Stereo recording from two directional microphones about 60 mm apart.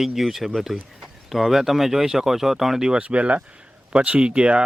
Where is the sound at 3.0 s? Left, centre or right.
Right.